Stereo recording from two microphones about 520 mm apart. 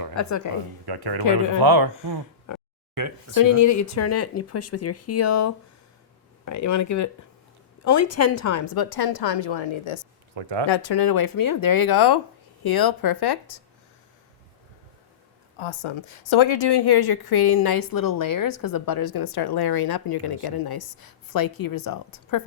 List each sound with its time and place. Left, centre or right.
0.1 s a woman's voice: left
0.9 s speech: right
1.2 s speech: left
1.5 s speech: right
2.5 s a sound: left
2.9 s speech: right
3.3 s a woman's voice: left
10.3 s speech: right
10.7 s a woman's voice: left
15.5 s a woman's voice: left